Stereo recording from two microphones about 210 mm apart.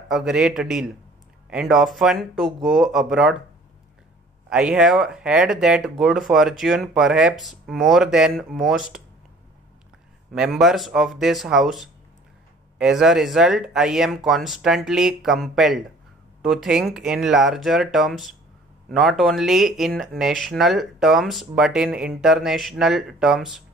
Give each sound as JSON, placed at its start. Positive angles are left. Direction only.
{"t": 0.1, "sound": "speech", "side_deg": 0}
{"t": 4.5, "sound": "speech", "side_deg": -5}
{"t": 10.3, "sound": "speech", "side_deg": 0}